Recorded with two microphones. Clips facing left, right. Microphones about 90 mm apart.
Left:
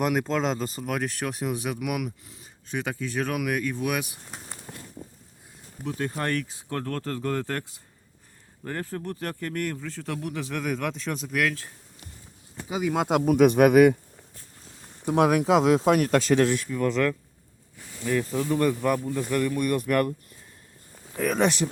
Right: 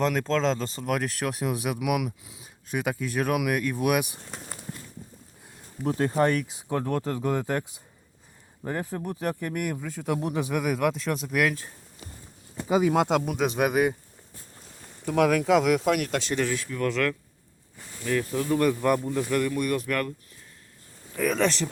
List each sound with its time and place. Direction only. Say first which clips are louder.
0.0 s speech: right 1 dB; 10° left (ahead or behind); by 4.1 s 10° right (ahead or behind)
5.8 s speech: right 5 dB; 35° right (ahead or behind)
6.1 s speech: right 5 dB; 15° right (ahead or behind)
8.6 s speech: right 1 dB; 10° right (ahead or behind)
11.3 s speech: right 1 dB; 15° right (ahead or behind)
13.2 s speech: left 8 dB; 55° left (ahead or behind)
15.0 s speech: left 1 dB; 25° left (ahead or behind); by 16.3 s 40° left (ahead or behind)
16.6 s speech: left 2 dB; 10° left (ahead or behind)
18.7 s speech: right 1 dB; centre (ahead or behind)
21.3 s speech: left 4 dB; 15° left (ahead or behind)